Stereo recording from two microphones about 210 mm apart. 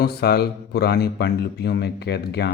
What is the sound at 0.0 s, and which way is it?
Speech, 50° left (ahead or behind).